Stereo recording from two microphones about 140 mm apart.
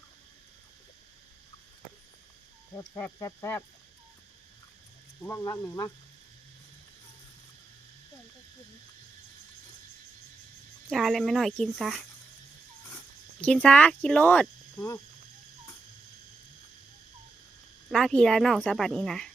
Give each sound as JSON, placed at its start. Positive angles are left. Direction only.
{"t": 2.7, "sound": "speech", "side_deg": 25}
{"t": 5.2, "sound": "speech", "side_deg": 25}
{"t": 10.8, "sound": "speech", "side_deg": 0}
{"t": 13.4, "sound": "speech", "side_deg": 10}
{"t": 17.9, "sound": "speech", "side_deg": 5}